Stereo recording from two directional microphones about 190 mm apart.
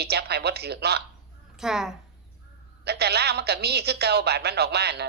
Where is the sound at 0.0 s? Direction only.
60° right (ahead or behind).